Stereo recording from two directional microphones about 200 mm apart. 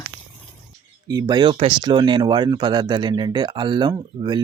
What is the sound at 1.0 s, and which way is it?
Speech, 20° right (ahead or behind).